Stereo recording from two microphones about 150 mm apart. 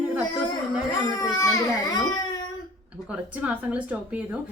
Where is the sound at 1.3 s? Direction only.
20° left (ahead or behind).